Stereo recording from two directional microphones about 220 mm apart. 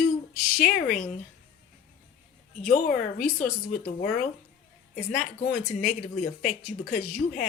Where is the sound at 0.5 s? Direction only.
35° left (ahead or behind).